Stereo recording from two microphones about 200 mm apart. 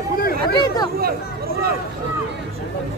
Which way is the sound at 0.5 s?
20° left (ahead or behind).